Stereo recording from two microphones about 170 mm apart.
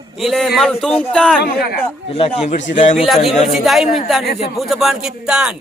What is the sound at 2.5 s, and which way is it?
Speech, 45° left (ahead or behind).